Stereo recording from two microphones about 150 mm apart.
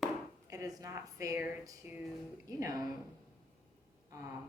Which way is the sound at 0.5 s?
25° right (ahead or behind).